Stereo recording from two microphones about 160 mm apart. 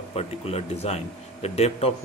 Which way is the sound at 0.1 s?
40° left (ahead or behind).